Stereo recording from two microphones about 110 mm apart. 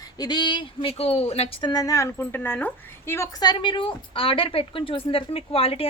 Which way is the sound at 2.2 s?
20° left (ahead or behind).